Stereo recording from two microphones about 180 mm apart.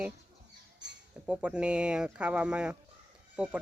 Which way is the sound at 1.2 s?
5° right (ahead or behind).